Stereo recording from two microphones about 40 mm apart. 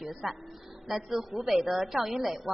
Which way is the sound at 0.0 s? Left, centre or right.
Centre.